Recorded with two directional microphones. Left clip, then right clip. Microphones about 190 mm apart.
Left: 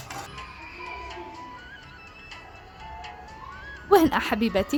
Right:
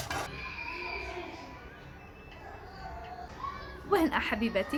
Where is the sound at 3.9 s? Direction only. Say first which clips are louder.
Left 8 dB; 50° left (ahead or behind).